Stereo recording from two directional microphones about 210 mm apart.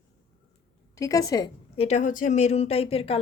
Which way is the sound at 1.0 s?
15° left (ahead or behind).